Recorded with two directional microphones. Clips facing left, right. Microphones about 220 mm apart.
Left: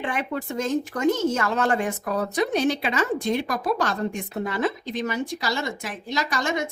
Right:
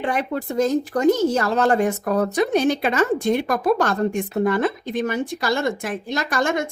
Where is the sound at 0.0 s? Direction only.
40° right (ahead or behind).